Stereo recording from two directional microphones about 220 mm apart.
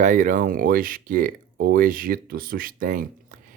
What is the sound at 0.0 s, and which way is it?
Speech, 35° right (ahead or behind).